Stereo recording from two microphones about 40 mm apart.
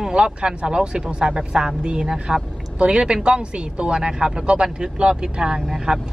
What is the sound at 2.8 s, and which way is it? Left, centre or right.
Speech, right.